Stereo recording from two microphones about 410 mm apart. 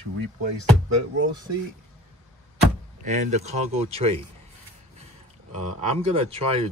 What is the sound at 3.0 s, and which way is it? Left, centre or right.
Speech, centre.